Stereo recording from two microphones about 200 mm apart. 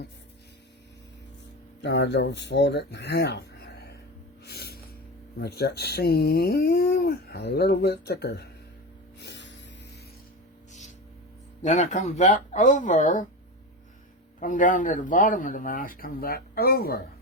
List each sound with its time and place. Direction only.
1.8 s speech: 60° left (ahead or behind)
4.4 s snort: 55° left (ahead or behind)
5.4 s speech: 50° left (ahead or behind)
9.2 s music: 60° left (ahead or behind)
10.7 s a sound: 35° left (ahead or behind)
11.6 s speech: 35° left (ahead or behind)
14.3 s speech: 40° left (ahead or behind)